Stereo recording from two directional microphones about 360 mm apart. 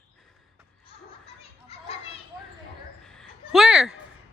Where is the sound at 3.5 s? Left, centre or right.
Centre.